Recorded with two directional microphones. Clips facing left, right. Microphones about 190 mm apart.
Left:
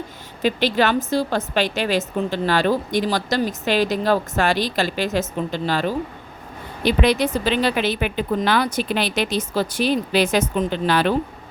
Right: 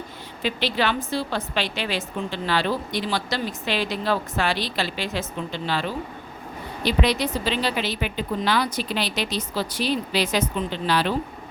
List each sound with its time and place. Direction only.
0.4 s a woman's voice: 45° left (ahead or behind)